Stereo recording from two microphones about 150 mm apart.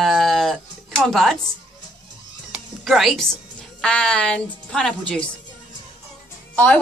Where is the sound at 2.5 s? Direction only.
Centre (ahead or behind).